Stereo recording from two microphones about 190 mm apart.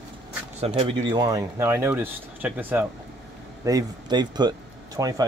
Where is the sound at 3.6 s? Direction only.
20° right (ahead or behind).